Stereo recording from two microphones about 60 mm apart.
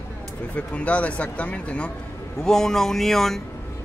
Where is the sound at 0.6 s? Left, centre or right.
Left.